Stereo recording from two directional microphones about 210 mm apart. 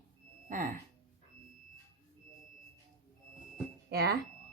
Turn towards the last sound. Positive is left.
turn(degrees=-50)  # may be behind; listen again after turning